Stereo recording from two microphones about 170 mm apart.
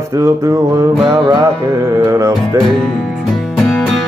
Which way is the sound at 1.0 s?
30° right (ahead or behind).